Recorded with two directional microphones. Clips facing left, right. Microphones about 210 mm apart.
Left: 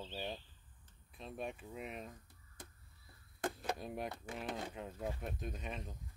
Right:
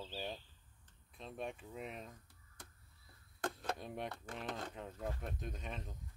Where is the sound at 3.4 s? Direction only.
5° left (ahead or behind).